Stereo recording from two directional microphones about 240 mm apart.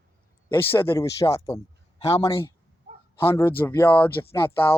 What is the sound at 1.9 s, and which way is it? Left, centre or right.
Speech, left.